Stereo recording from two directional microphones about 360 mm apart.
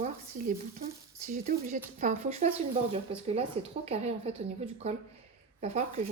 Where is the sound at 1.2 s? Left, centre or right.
Right.